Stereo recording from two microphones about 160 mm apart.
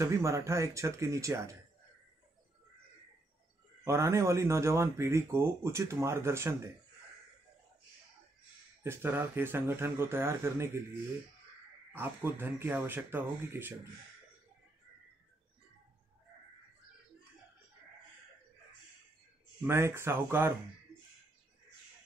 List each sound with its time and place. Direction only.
0.0 s speech: 20° right (ahead or behind)
3.8 s speech: 15° right (ahead or behind)
8.8 s speech: 15° right (ahead or behind)
11.9 s speech: 15° right (ahead or behind)
19.6 s speech: 15° right (ahead or behind)